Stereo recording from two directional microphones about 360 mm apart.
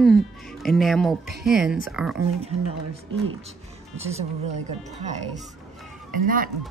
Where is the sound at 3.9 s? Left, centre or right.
Centre.